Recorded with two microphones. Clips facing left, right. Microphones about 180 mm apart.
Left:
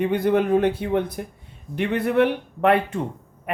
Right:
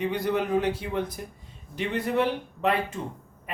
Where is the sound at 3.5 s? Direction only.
60° left (ahead or behind).